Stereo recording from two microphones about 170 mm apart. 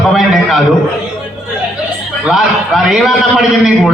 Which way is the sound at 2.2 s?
Centre (ahead or behind).